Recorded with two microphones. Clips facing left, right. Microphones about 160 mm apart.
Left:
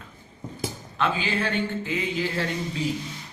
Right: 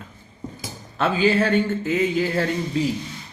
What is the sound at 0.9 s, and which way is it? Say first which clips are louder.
Speech: right 8 dB; 40° right (ahead or behind).